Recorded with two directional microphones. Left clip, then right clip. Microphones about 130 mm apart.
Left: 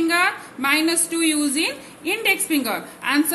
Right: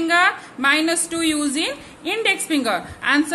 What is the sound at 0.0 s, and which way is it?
A woman's voice, 50° right (ahead or behind).